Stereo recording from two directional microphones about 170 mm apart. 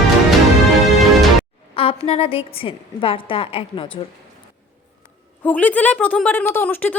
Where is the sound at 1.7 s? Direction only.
35° left (ahead or behind).